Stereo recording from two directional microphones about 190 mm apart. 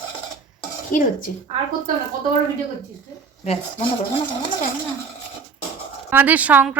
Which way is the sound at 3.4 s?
35° left (ahead or behind).